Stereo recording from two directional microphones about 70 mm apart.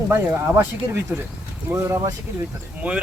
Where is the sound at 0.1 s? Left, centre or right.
Right.